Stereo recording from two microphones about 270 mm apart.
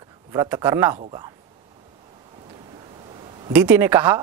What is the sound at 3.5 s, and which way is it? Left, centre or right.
Speech, centre.